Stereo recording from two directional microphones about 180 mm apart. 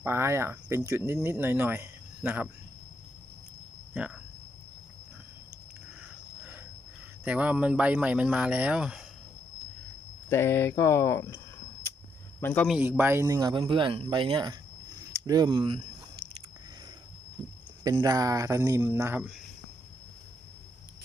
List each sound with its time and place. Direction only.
0.0 s speech: 15° right (ahead or behind)
3.9 s speech: 5° right (ahead or behind)
6.0 s a sound: 5° right (ahead or behind)
7.3 s speech: 10° right (ahead or behind)
10.2 s speech: 15° left (ahead or behind)
12.4 s speech: 10° left (ahead or behind)
12.6 s speech: 5° right (ahead or behind); by 15.8 s 25° right (ahead or behind)
17.8 s speech: 20° right (ahead or behind)